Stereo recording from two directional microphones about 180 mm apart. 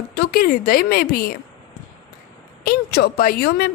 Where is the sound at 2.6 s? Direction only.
60° left (ahead or behind).